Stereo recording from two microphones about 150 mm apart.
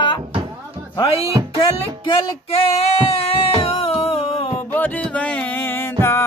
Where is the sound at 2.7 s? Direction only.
40° left (ahead or behind).